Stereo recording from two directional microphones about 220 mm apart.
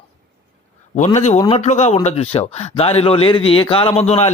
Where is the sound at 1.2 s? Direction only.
30° left (ahead or behind).